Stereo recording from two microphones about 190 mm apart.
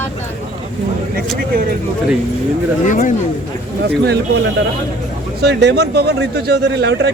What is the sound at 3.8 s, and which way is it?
Speech, 60° right (ahead or behind).